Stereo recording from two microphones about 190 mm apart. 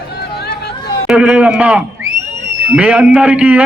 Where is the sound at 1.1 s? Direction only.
5° right (ahead or behind).